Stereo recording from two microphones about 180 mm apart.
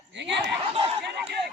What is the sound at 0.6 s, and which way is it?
Speech, 30° right (ahead or behind).